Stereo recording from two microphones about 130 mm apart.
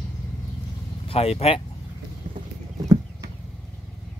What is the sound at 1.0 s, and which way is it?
Speech, 50° left (ahead or behind).